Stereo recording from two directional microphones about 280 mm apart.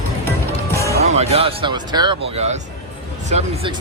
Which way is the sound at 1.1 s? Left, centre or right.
Right.